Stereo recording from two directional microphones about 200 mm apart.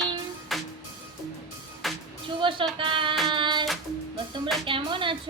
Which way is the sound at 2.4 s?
25° right (ahead or behind).